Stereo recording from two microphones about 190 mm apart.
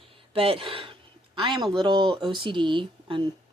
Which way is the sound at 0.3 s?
30° right (ahead or behind).